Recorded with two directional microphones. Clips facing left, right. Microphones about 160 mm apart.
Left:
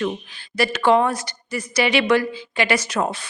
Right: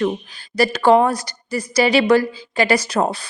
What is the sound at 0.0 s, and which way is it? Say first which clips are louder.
A woman's voice: right 4 dB; 35° right (ahead or behind).